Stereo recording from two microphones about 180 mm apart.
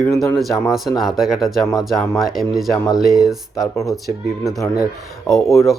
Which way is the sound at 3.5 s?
20° left (ahead or behind).